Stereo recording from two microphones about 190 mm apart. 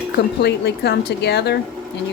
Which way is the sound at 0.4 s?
60° left (ahead or behind).